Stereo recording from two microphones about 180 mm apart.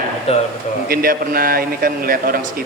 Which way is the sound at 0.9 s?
55° right (ahead or behind).